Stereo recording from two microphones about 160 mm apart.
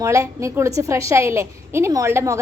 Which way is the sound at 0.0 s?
20° right (ahead or behind).